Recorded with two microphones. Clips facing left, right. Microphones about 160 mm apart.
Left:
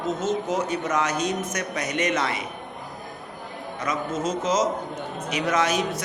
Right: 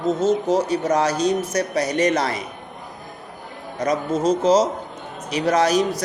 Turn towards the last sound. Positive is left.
turn(degrees=-35)  # may be behind; listen again after turning